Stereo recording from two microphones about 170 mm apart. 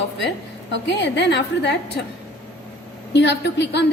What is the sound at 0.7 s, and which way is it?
A woman's voice, 90° left.